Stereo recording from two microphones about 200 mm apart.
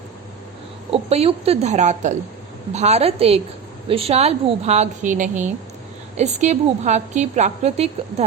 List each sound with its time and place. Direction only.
0.9 s a woman's voice: 30° right (ahead or behind)